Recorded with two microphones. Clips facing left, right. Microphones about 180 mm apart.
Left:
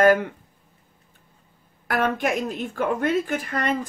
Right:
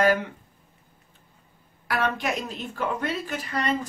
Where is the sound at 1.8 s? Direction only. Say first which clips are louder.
Left 3 dB; 50° left (ahead or behind).